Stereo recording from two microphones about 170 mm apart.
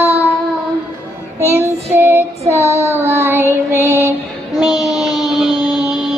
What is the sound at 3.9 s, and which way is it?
Music, 15° right (ahead or behind).